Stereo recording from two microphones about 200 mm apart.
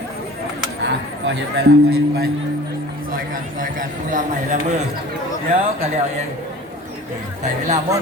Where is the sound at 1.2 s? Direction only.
60° right (ahead or behind).